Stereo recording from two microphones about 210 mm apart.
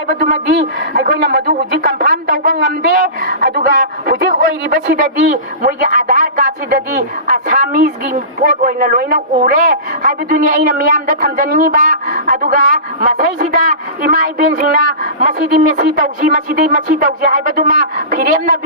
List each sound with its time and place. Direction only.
0.9 s a man's voice: 45° right (ahead or behind)